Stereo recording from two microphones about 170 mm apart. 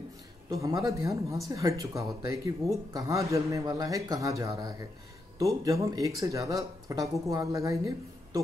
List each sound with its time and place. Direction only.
0.5 s speech: 20° right (ahead or behind)